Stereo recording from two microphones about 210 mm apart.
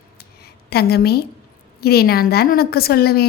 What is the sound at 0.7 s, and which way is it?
A woman's voice, 50° left (ahead or behind).